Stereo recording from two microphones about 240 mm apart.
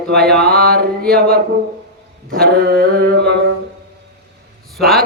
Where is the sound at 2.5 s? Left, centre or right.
Right.